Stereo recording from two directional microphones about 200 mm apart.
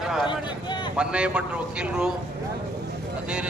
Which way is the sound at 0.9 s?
5° right (ahead or behind).